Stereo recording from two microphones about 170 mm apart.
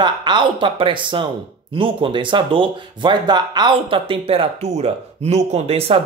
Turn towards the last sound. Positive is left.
turn(degrees=-35)  # may be behind; listen again after turning